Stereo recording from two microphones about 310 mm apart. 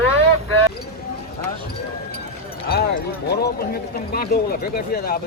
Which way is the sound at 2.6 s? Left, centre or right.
Left.